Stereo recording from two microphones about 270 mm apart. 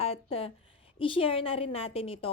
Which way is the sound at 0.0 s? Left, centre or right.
Left.